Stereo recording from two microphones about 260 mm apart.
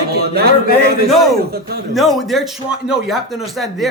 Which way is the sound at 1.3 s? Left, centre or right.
Right.